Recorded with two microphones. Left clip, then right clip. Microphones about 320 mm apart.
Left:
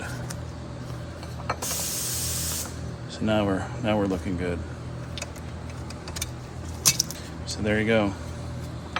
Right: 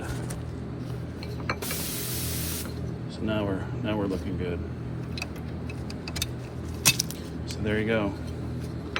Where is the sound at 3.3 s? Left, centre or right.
Centre.